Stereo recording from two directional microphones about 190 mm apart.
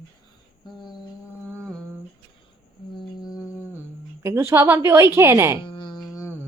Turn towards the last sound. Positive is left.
turn(degrees=15)  # may be behind; listen again after turning